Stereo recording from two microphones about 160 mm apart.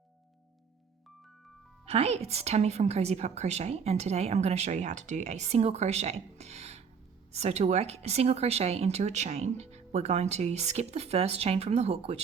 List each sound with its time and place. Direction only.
1.9 s a woman's voice: 40° right (ahead or behind)